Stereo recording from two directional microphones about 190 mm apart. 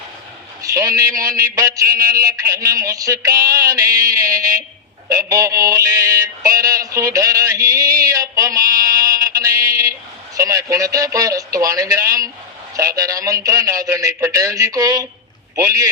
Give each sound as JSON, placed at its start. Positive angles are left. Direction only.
{"t": 0.6, "sound": "a man's voice", "side_deg": -15}
{"t": 5.0, "sound": "mantra", "side_deg": -15}
{"t": 10.3, "sound": "a man's voice", "side_deg": -15}